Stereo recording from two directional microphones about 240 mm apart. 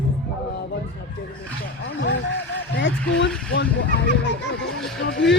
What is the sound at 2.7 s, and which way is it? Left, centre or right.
Speech, left.